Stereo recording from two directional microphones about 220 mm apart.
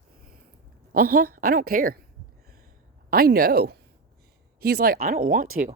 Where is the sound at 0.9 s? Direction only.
40° right (ahead or behind).